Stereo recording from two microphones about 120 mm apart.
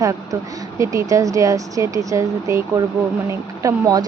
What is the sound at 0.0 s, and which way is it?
Speech, 30° right (ahead or behind).